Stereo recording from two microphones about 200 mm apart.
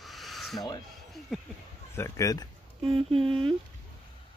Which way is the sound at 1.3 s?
Centre (ahead or behind).